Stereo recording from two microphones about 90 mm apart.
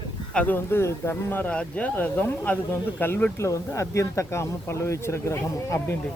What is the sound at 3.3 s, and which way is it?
Speech, 35° left (ahead or behind).